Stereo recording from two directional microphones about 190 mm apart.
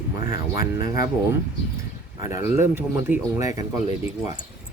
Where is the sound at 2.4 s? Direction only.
10° right (ahead or behind).